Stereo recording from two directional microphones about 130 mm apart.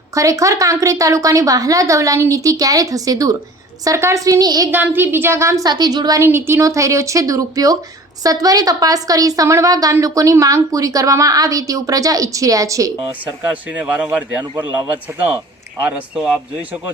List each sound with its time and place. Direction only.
0.1 s speech: 25° right (ahead or behind)
4.7 s speech: 15° right (ahead or behind); by 6.2 s 30° right (ahead or behind)
6.2 s speech: 20° right (ahead or behind)
13.5 s speech: 10° right (ahead or behind)
15.8 s speech: 10° right (ahead or behind)